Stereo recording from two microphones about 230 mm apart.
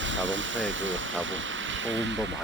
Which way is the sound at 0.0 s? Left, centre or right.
Right.